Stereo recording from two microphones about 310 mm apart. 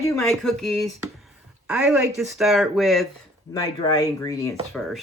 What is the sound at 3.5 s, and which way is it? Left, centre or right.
Cutlery, centre.